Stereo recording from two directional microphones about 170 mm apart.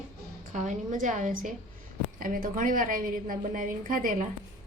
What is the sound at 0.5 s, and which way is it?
A woman's voice, 45° right (ahead or behind).